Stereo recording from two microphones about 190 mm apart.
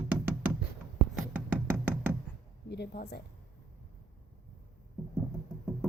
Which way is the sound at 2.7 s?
60° left (ahead or behind).